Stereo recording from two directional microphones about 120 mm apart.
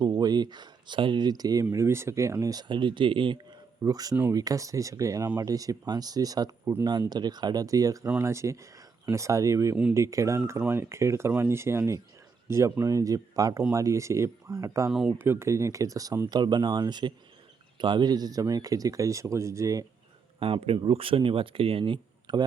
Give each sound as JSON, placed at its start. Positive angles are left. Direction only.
{"t": 0.1, "sound": "speech", "side_deg": -35}
{"t": 3.8, "sound": "speech", "side_deg": -30}
{"t": 16.3, "sound": "speech", "side_deg": -35}
{"t": 20.4, "sound": "speech", "side_deg": -50}